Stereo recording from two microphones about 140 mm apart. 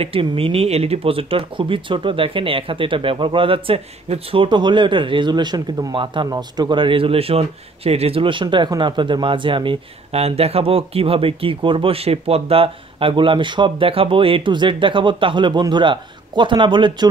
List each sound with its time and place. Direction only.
0.0 s speech: 40° right (ahead or behind)